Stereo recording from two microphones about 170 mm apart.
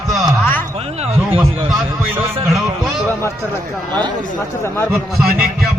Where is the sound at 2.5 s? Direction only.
Centre (ahead or behind).